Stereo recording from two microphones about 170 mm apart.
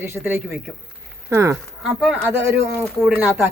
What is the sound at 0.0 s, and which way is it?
A woman's voice, 15° right (ahead or behind).